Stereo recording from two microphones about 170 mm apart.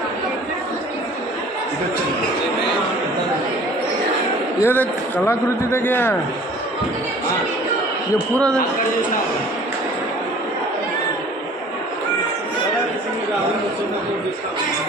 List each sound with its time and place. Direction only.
4.6 s a man's voice: 10° left (ahead or behind)